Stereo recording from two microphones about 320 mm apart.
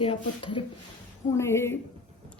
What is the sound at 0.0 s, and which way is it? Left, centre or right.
A woman's voice, centre.